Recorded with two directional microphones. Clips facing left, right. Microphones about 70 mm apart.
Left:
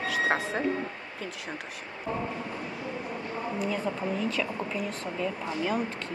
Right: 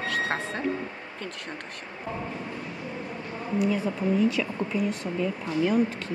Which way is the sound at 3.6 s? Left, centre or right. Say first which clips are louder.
Right 6 dB; centre.